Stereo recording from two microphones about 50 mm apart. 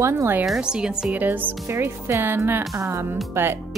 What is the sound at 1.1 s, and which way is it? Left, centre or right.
Speech, right.